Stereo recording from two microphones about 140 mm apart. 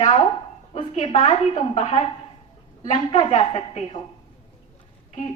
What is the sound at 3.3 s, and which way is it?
Speech, 35° left (ahead or behind).